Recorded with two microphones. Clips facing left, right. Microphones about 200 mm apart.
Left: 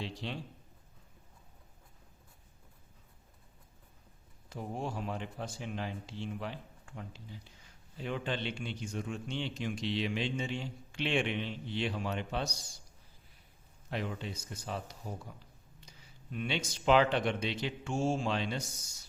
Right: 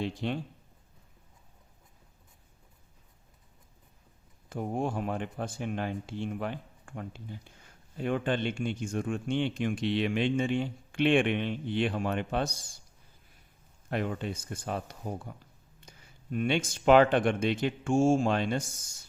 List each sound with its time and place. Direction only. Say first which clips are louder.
0.0 s speech: right 8 dB; 50° right (ahead or behind)
4.4 s speech: right 7 dB; 50° right (ahead or behind)
13.9 s speech: right 6 dB; 55° right (ahead or behind)